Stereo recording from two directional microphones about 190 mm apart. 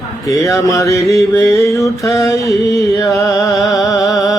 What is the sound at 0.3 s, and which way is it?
Mantra, 15° left (ahead or behind).